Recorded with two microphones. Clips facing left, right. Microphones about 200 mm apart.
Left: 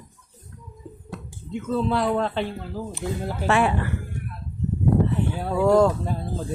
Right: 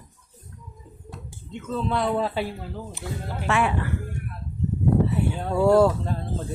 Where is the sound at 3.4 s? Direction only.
35° left (ahead or behind).